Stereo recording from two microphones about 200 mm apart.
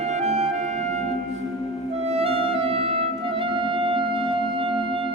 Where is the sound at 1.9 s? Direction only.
35° right (ahead or behind).